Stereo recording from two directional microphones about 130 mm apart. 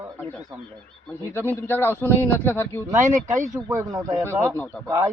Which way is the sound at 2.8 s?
25° right (ahead or behind).